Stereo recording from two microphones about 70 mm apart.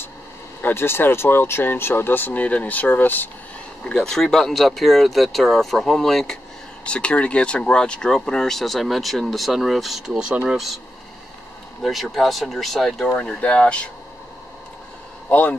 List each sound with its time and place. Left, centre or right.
0.6 s speech: left
3.9 s speech: centre
11.8 s speech: centre
15.2 s speech: left